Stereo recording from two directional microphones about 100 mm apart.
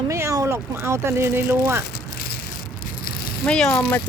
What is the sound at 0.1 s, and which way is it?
Speech, 30° right (ahead or behind).